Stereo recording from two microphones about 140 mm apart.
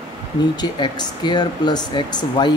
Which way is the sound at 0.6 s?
30° left (ahead or behind).